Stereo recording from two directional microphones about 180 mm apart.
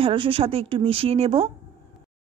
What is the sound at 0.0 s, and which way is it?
A woman's voice, 30° right (ahead or behind).